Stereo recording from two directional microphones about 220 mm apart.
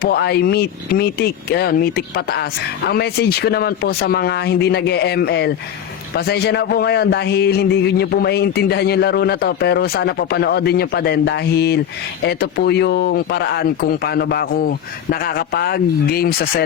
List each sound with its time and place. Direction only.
0.0 s a man's voice: 45° left (ahead or behind)